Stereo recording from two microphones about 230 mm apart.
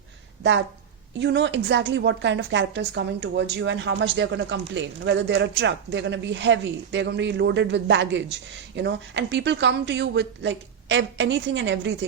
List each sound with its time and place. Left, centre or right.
1.2 s a woman's voice: right